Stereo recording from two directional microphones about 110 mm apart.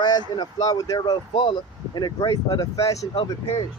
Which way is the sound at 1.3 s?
50° left (ahead or behind).